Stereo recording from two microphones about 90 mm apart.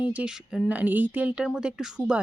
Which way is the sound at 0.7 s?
20° right (ahead or behind).